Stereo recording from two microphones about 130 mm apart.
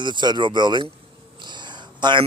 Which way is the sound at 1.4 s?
35° right (ahead or behind).